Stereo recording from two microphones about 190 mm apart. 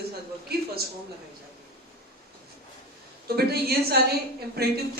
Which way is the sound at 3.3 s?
55° right (ahead or behind).